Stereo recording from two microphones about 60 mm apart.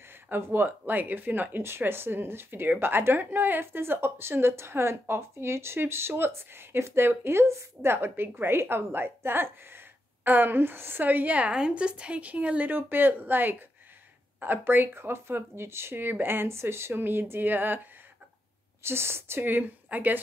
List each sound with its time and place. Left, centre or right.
0.3 s a woman's voice: right
18.8 s a woman's voice: right